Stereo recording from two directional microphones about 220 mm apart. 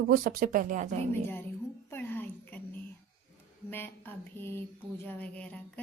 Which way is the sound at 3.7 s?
10° left (ahead or behind).